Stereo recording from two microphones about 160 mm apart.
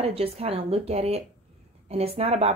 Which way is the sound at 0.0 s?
35° right (ahead or behind).